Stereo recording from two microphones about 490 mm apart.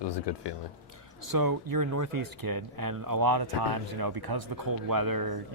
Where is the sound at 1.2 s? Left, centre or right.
Right.